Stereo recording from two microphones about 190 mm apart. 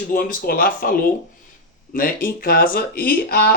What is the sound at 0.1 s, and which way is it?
Speech, 50° left (ahead or behind).